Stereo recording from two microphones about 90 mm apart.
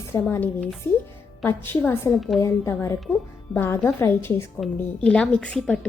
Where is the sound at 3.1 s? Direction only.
20° left (ahead or behind).